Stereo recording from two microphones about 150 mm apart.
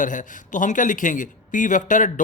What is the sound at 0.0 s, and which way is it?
A man's voice, 60° left (ahead or behind).